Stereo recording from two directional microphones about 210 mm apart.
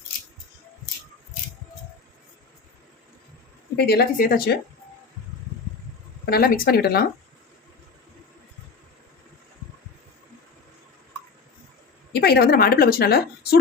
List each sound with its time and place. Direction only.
3.8 s a woman's voice: 50° left (ahead or behind)
6.2 s a woman's voice: 45° left (ahead or behind)
12.1 s a woman's voice: 50° left (ahead or behind)